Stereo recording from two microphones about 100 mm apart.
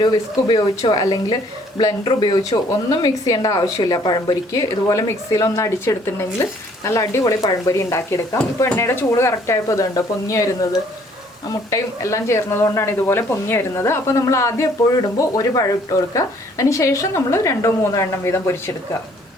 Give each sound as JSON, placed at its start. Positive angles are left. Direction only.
{"t": 0.0, "sound": "speech", "side_deg": 50}
{"t": 3.0, "sound": "speech", "side_deg": 40}